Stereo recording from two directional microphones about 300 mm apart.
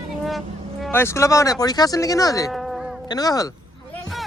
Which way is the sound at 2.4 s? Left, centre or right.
Centre.